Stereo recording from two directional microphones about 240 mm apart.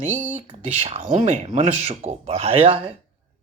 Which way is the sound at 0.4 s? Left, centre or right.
Right.